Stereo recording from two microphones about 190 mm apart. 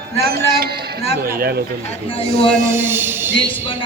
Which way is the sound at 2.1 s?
30° left (ahead or behind).